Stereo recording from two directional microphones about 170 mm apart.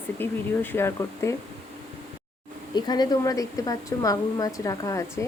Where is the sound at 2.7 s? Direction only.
25° left (ahead or behind).